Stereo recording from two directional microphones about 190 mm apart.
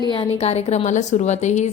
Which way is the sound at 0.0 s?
30° left (ahead or behind).